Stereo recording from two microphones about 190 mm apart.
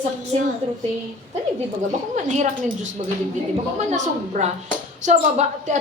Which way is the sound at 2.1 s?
40° right (ahead or behind).